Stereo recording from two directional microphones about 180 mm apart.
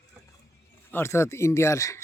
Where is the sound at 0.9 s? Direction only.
15° left (ahead or behind).